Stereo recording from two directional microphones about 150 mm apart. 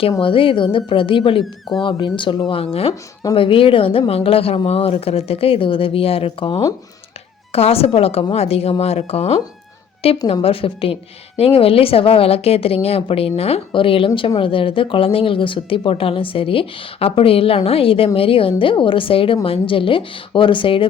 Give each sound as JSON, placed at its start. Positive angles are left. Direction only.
{"t": 0.2, "sound": "a woman's voice", "side_deg": 35}